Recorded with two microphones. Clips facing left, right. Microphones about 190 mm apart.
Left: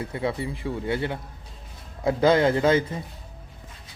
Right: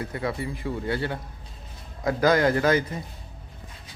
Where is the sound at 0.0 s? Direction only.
25° left (ahead or behind).